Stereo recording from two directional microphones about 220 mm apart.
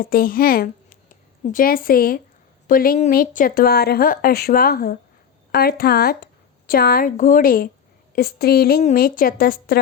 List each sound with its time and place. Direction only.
0.0 s a woman's voice: 40° left (ahead or behind)